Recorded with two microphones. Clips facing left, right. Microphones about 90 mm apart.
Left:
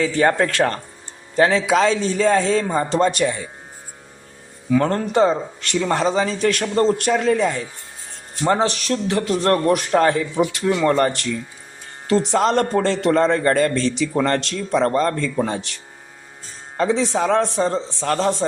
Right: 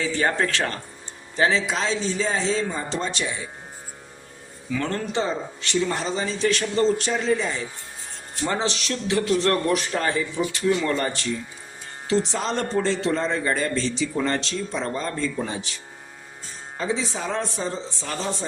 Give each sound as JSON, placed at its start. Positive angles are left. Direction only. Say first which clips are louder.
{"t": 0.0, "sound": "a man's voice", "louder": "left 6 dB", "side_deg": 45}
{"t": 4.7, "sound": "a man's voice", "louder": "left 8 dB", "side_deg": 40}
{"t": 9.9, "sound": "a man's voice", "louder": "left 8 dB", "side_deg": 60}
{"t": 12.3, "sound": "a man's voice", "louder": "left 8 dB", "side_deg": 60}
{"t": 16.7, "sound": "a man's voice", "louder": "left 8 dB", "side_deg": 70}